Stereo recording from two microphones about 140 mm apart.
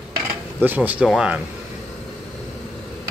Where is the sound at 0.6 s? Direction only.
15° right (ahead or behind).